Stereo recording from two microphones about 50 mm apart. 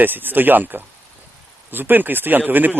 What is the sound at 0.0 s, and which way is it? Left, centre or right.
Speech, right.